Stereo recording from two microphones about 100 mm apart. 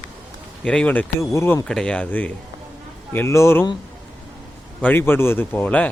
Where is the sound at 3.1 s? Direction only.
25° left (ahead or behind).